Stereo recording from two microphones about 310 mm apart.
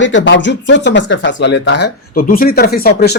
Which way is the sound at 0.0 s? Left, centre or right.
Left.